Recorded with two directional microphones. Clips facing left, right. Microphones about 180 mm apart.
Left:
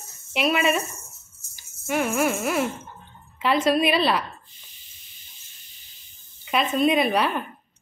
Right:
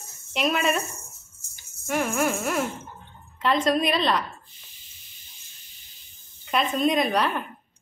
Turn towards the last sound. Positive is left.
turn(degrees=5)  # may be behind; listen again after turning